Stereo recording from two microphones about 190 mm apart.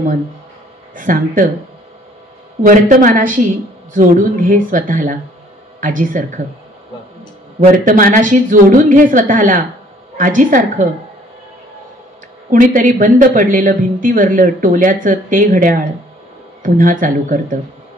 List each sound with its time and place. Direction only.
0.9 s a woman's voice: 45° right (ahead or behind)
2.6 s a woman's voice: 45° right (ahead or behind)
7.6 s a woman's voice: 45° right (ahead or behind)
12.4 s a woman's voice: 45° right (ahead or behind)